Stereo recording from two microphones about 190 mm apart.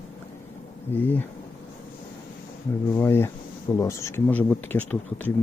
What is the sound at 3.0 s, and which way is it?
Speech, 10° left (ahead or behind).